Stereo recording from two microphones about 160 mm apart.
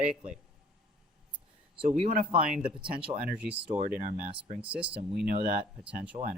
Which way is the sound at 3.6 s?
35° right (ahead or behind).